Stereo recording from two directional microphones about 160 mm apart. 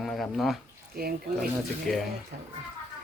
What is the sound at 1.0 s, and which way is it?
Speech, 70° right (ahead or behind).